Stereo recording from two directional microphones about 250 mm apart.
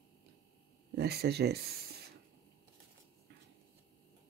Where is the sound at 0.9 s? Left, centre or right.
Right.